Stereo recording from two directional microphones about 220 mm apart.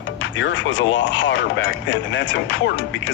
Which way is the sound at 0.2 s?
55° left (ahead or behind).